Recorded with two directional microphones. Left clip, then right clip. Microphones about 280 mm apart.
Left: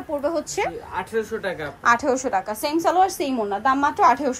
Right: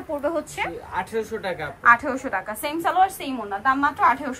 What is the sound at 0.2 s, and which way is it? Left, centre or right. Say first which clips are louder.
Speech: left 2 dB; centre.